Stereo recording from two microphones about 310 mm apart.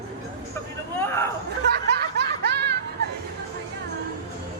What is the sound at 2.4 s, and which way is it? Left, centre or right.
Music, right.